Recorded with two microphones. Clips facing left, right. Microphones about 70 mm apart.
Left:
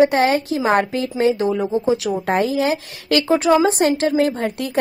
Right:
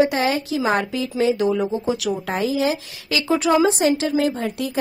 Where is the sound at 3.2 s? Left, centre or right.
Left.